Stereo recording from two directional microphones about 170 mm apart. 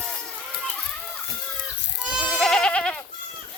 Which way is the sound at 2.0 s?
5° right (ahead or behind).